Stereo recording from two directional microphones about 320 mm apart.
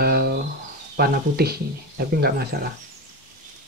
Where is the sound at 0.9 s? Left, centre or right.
Right.